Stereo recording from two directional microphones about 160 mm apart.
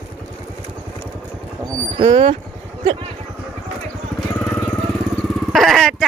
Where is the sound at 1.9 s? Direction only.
35° right (ahead or behind).